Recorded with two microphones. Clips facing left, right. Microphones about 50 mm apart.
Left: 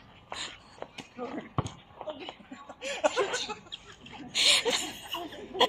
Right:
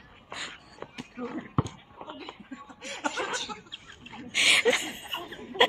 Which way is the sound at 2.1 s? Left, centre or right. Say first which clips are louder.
Left 2 dB; centre.